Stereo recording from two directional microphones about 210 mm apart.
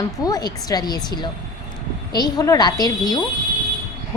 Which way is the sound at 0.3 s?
20° left (ahead or behind).